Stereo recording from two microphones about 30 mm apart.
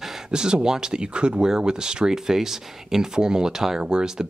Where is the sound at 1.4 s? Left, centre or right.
Right.